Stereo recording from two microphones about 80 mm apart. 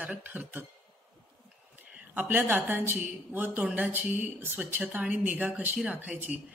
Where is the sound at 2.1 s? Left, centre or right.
Right.